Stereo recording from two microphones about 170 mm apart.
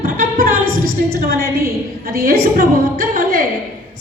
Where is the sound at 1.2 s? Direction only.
65° right (ahead or behind).